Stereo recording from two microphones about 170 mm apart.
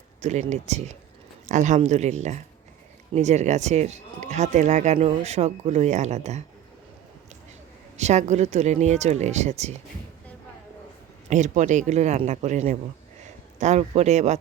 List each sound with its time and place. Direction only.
0.2 s speech: 40° right (ahead or behind)
7.9 s speech: 45° right (ahead or behind)
11.3 s speech: 45° right (ahead or behind)